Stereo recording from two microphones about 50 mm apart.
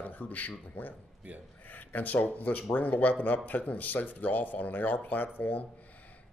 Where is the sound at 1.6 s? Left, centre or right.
Left.